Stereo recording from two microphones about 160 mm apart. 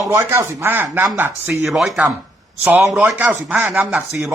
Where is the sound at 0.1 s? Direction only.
15° right (ahead or behind).